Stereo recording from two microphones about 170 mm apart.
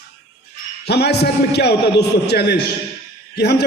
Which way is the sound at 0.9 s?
75° left (ahead or behind).